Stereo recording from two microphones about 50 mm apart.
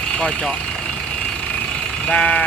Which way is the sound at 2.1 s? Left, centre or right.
Centre.